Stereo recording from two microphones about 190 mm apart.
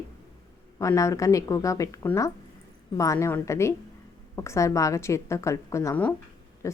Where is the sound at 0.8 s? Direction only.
15° left (ahead or behind).